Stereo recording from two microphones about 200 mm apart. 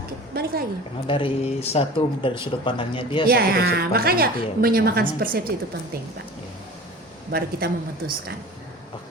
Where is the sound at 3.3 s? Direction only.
50° right (ahead or behind).